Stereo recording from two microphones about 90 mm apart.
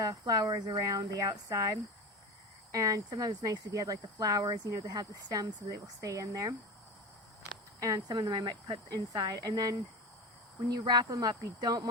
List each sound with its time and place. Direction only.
0.0 s speech: 45° right (ahead or behind)
7.8 s speech: 40° right (ahead or behind)
10.8 s speech: 50° right (ahead or behind)